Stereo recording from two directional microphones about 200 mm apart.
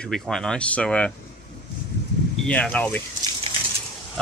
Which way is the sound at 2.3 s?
5° left (ahead or behind).